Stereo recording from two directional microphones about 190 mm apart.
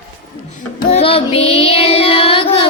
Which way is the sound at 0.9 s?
30° left (ahead or behind).